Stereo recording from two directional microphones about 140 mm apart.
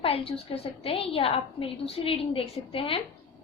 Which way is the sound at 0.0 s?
45° left (ahead or behind).